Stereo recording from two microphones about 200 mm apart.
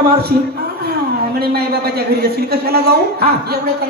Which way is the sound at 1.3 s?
50° right (ahead or behind).